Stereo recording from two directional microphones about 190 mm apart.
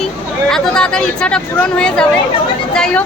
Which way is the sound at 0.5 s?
5° left (ahead or behind).